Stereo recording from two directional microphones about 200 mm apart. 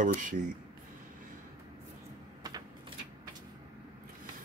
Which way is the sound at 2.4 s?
20° right (ahead or behind).